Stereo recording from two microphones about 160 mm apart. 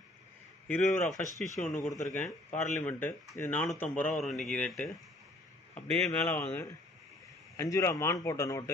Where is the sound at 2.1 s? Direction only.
10° left (ahead or behind).